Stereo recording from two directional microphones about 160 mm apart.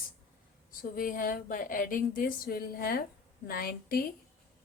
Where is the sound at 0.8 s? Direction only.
60° left (ahead or behind).